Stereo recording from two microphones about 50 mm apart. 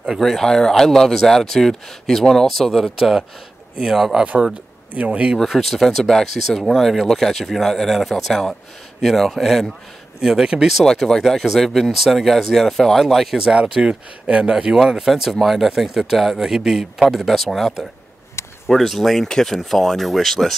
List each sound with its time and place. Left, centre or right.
0.2 s speech: centre
4.2 s speech: centre
5.5 s speech: centre
10.2 s speech: centre
10.9 s speech: centre
13.4 s speech: centre
14.5 s speech: centre
17.3 s speech: centre
18.4 s a sound: left
18.7 s speech: centre